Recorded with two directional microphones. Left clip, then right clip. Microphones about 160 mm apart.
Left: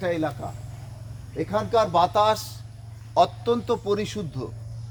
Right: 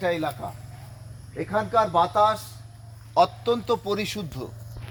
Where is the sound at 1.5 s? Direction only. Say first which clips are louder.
Even; 20° left (ahead or behind).